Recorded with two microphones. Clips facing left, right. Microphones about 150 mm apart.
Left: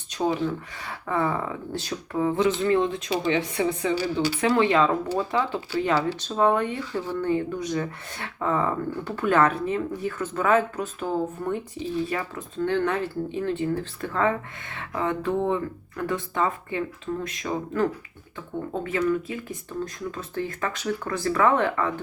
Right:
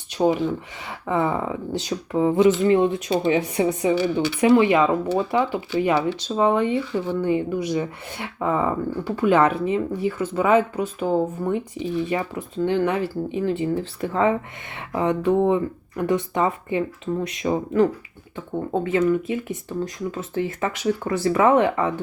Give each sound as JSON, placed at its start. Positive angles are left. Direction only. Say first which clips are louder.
{"t": 0.2, "sound": "speech", "louder": "right 5 dB", "side_deg": -15}
{"t": 6.3, "sound": "speech", "louder": "right 3 dB", "side_deg": -10}